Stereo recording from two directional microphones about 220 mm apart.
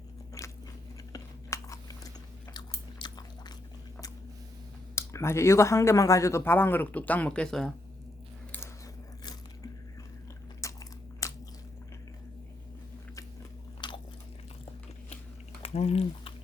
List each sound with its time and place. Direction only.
1.1 s chewing: 15° left (ahead or behind)
2.5 s biting: 20° left (ahead or behind)
4.9 s speech: 10° left (ahead or behind)
10.6 s biting: 15° left (ahead or behind)
11.2 s squish: 15° left (ahead or behind)
13.8 s biting: 20° left (ahead or behind)
15.6 s a sound: 25° left (ahead or behind)